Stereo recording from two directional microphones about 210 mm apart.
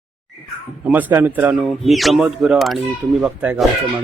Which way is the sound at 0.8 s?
5° right (ahead or behind).